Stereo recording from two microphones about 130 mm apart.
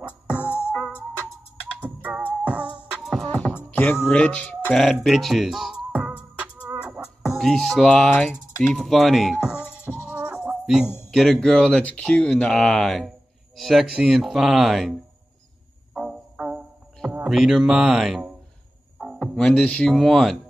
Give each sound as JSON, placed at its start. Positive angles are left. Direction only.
{"t": 0.3, "sound": "music", "side_deg": 15}
{"t": 1.8, "sound": "music", "side_deg": -10}
{"t": 3.3, "sound": "music", "side_deg": 10}
{"t": 4.1, "sound": "a sound", "side_deg": 10}
{"t": 8.1, "sound": "speech", "side_deg": 10}
{"t": 8.6, "sound": "speech", "side_deg": 0}
{"t": 9.8, "sound": "insect", "side_deg": -10}
{"t": 11.1, "sound": "speech", "side_deg": 0}
{"t": 15.9, "sound": "music", "side_deg": 0}
{"t": 17.2, "sound": "speech", "side_deg": 0}
{"t": 18.9, "sound": "music", "side_deg": -5}
{"t": 19.2, "sound": "speech", "side_deg": 5}